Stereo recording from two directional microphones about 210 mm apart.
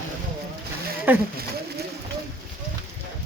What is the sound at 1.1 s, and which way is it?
Speech, 10° right (ahead or behind).